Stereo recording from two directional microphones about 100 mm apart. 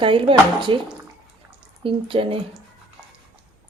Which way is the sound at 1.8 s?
60° right (ahead or behind).